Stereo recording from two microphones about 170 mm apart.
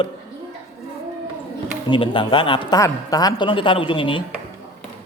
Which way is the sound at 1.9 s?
30° left (ahead or behind).